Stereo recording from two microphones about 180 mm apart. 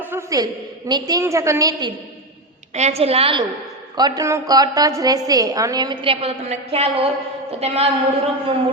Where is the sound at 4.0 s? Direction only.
20° right (ahead or behind).